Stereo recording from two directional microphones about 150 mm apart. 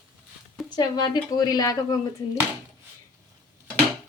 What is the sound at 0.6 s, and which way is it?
Speech, 25° left (ahead or behind).